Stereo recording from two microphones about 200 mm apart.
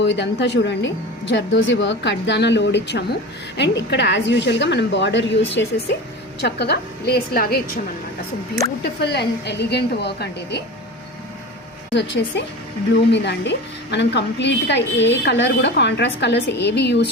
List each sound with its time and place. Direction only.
0.0 s a woman's voice: 60° left (ahead or behind)
8.8 s a woman's voice: 55° left (ahead or behind)
11.9 s a woman's voice: 60° left (ahead or behind)